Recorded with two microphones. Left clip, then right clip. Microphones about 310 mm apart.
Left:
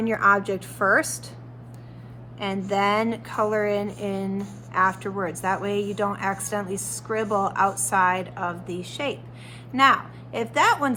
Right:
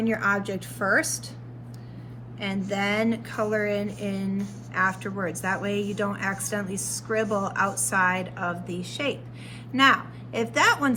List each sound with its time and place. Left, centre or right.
0.0 s a woman's voice: centre
2.6 s a woman's voice: centre